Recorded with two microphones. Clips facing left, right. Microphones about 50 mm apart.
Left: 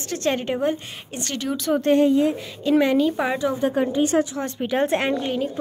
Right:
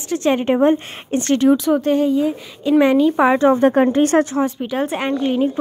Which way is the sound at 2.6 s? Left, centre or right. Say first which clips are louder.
Right 5 dB; centre.